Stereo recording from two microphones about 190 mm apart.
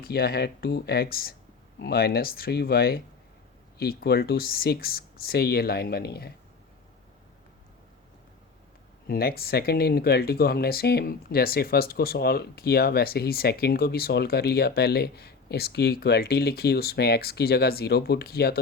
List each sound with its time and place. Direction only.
0.0 s speech: 55° left (ahead or behind)
9.0 s speech: 55° left (ahead or behind)